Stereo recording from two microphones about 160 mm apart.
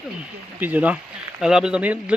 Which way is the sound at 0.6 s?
10° right (ahead or behind).